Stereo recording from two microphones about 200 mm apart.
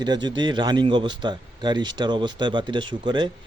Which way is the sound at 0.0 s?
20° right (ahead or behind).